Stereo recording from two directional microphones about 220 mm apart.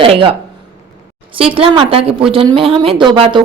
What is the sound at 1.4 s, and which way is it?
A woman's voice, 25° right (ahead or behind).